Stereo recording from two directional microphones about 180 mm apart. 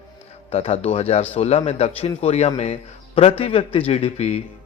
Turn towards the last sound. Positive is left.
turn(degrees=35)  # may be behind; listen again after turning